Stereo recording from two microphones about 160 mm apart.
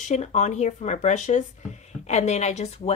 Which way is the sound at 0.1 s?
45° left (ahead or behind).